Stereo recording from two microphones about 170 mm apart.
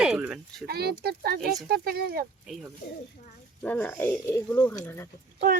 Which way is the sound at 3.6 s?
10° left (ahead or behind).